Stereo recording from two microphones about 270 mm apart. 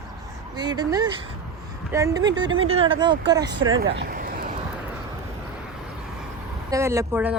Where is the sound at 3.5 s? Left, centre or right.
Right.